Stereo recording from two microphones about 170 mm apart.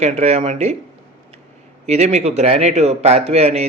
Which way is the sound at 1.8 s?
40° right (ahead or behind).